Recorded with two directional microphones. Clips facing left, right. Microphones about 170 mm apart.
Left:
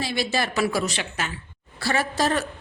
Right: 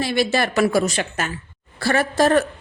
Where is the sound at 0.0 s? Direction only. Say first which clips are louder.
Right 6 dB; 55° right (ahead or behind).